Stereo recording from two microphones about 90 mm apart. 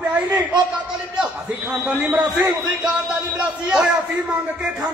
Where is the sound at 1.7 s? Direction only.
10° right (ahead or behind).